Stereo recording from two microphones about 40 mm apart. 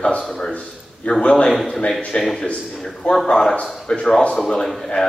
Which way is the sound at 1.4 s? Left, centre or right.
Centre.